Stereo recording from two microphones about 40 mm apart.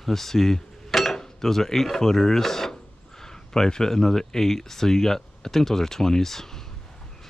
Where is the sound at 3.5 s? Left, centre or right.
Centre.